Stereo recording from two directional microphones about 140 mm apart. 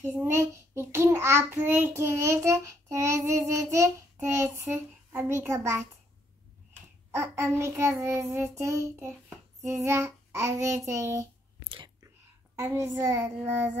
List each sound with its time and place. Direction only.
0.0 s a child's voice: 15° right (ahead or behind)
7.2 s a child's voice: 20° right (ahead or behind)
9.6 s child singing: 20° right (ahead or behind)
10.9 s a child's voice: 20° right (ahead or behind)
11.6 s whispering: 35° right (ahead or behind)
12.5 s a child's voice: 20° right (ahead or behind)
13.4 s child singing: 15° right (ahead or behind)